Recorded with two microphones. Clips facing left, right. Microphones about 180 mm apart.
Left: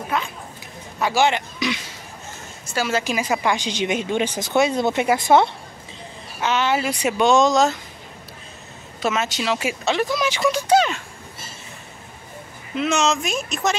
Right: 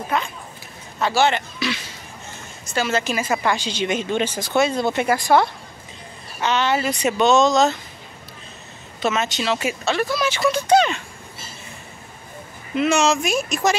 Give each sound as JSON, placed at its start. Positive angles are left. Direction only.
{"t": 0.1, "sound": "a man's voice", "side_deg": 5}
{"t": 6.4, "sound": "a woman's voice", "side_deg": 5}
{"t": 9.0, "sound": "a woman's voice", "side_deg": 5}
{"t": 12.7, "sound": "speech", "side_deg": -5}